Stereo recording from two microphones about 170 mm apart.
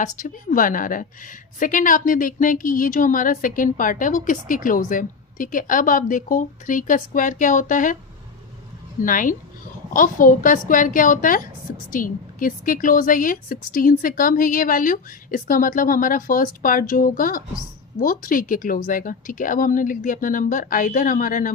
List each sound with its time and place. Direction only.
0.0 s a woman's voice: 50° left (ahead or behind)
9.0 s a woman's voice: 50° left (ahead or behind)